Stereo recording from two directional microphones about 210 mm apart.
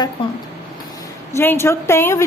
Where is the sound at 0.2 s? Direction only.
25° left (ahead or behind).